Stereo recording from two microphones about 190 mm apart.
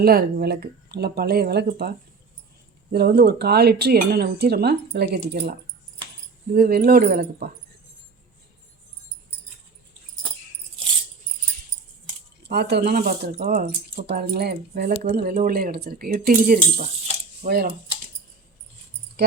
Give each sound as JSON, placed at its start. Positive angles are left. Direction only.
{"t": 0.0, "sound": "speech", "side_deg": -55}
{"t": 2.9, "sound": "speech", "side_deg": -55}
{"t": 12.4, "sound": "speech", "side_deg": -60}